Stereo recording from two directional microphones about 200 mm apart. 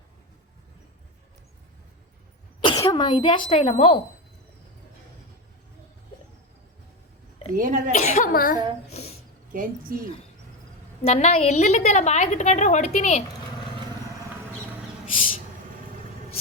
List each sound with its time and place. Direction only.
2.6 s speech: 25° left (ahead or behind)
7.5 s a woman's voice: 40° right (ahead or behind)
7.9 s a woman's voice: 35° left (ahead or behind)
8.9 s a sound: 30° left (ahead or behind)
9.9 s a woman's voice: 45° right (ahead or behind)
11.0 s a woman's voice: 30° left (ahead or behind)